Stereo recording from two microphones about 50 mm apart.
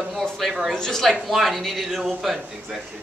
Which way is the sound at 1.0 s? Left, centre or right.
Centre.